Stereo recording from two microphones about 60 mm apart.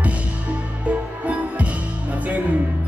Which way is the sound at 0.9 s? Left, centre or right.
Right.